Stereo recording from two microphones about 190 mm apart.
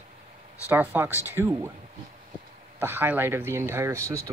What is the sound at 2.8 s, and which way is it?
Speech, 10° right (ahead or behind).